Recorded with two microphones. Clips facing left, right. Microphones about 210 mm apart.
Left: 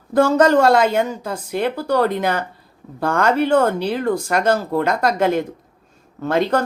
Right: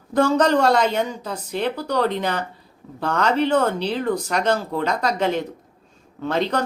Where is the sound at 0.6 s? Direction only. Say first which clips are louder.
Left 4 dB; 10° left (ahead or behind).